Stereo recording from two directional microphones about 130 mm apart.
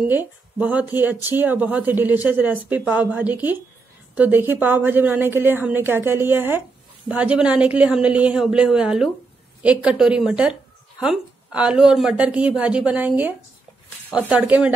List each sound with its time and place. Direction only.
0.1 s speech: 15° right (ahead or behind)